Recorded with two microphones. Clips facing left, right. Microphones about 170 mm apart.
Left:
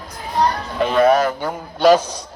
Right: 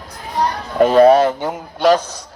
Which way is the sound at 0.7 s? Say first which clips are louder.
Right 6 dB; 40° right (ahead or behind).